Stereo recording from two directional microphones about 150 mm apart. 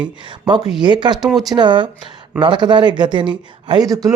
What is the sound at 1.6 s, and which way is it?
Speech, 30° right (ahead or behind).